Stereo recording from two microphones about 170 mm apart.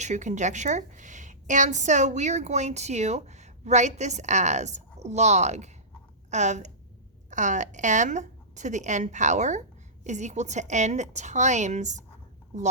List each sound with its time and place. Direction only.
0.0 s a woman's voice: 45° right (ahead or behind)